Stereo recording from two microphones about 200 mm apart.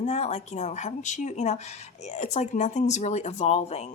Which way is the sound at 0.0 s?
35° left (ahead or behind).